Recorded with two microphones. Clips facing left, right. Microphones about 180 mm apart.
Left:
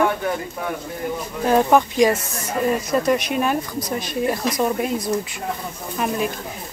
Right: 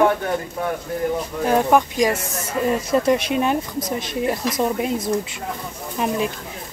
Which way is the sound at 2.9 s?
25° right (ahead or behind).